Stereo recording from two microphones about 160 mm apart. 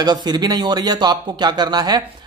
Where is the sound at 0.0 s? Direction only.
25° right (ahead or behind).